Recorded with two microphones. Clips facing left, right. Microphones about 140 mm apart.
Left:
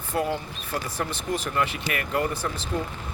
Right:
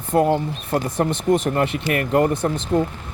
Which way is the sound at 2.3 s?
20° right (ahead or behind).